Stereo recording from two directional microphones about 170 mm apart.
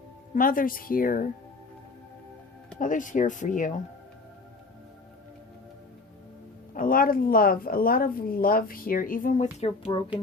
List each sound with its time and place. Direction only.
0.3 s a woman's voice: 55° left (ahead or behind)
2.7 s speech: 50° left (ahead or behind)
6.7 s a woman's voice: 55° left (ahead or behind); by 10.0 s 35° left (ahead or behind)